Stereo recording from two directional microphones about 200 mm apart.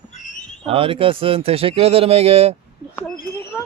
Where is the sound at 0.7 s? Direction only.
25° right (ahead or behind).